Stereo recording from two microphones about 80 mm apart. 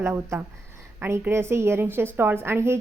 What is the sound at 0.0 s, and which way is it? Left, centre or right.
A woman's voice, right.